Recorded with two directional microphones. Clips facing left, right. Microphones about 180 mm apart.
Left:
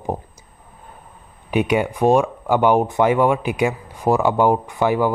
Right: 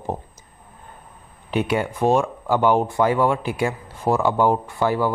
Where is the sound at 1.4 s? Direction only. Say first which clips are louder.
Left 3 dB; 15° left (ahead or behind).